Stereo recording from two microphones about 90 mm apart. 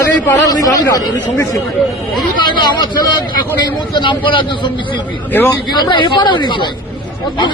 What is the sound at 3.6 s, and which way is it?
A man's voice, 55° left (ahead or behind).